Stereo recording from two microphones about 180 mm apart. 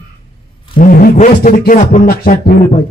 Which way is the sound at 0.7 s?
50° left (ahead or behind).